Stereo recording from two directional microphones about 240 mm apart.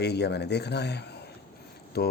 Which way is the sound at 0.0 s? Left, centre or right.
Left.